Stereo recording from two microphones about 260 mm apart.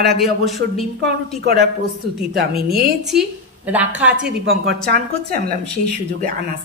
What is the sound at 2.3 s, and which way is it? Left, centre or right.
Speech, right.